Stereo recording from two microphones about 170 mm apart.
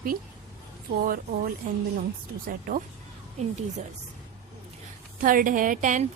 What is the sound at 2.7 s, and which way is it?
Speech, 55° right (ahead or behind).